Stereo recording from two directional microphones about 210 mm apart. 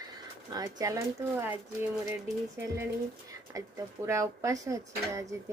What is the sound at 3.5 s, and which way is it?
A woman's voice, 15° right (ahead or behind).